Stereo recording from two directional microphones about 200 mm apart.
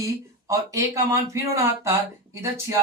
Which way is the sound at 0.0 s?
15° right (ahead or behind).